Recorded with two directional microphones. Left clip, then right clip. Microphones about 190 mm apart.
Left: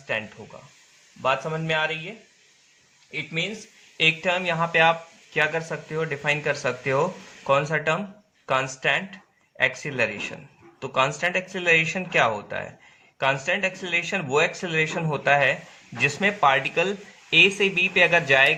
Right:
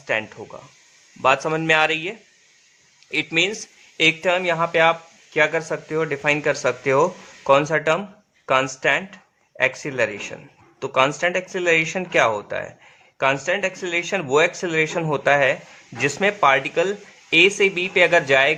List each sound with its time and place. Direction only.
0.1 s speech: 25° right (ahead or behind)
1.2 s speech: 40° right (ahead or behind)
3.9 s speech: 25° right (ahead or behind)